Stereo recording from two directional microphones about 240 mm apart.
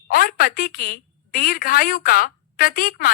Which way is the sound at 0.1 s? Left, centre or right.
Left.